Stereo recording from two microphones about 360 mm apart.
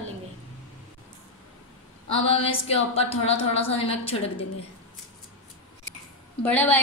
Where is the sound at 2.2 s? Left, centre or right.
Centre.